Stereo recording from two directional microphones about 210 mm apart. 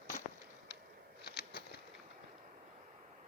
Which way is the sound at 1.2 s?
50° left (ahead or behind).